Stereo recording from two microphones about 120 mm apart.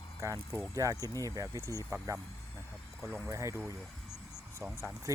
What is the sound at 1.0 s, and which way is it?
Speech, 25° left (ahead or behind).